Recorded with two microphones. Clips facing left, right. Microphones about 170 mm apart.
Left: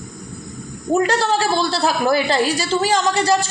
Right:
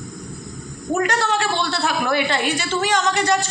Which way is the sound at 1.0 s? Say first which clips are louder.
Left 3 dB; 30° left (ahead or behind).